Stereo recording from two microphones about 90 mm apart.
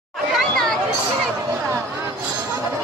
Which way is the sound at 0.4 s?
5° left (ahead or behind).